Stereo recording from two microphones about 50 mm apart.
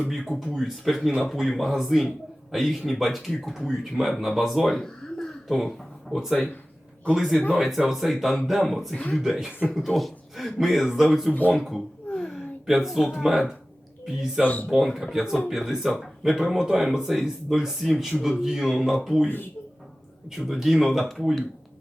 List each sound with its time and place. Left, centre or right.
0.1 s a man's voice: centre
4.7 s a sound: centre
6.1 s a man's voice: centre
11.5 s a sound: centre
12.6 s a man's voice: centre
14.4 s speech: left
14.7 s a man's voice: centre
20.3 s a man's voice: centre